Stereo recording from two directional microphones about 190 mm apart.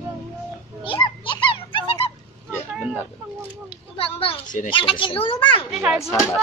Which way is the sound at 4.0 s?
30° left (ahead or behind).